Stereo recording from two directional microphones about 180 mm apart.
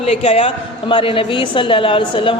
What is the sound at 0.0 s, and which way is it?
A woman's voice, 35° left (ahead or behind).